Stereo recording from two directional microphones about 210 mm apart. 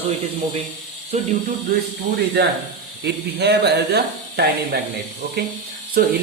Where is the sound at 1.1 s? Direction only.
30° right (ahead or behind).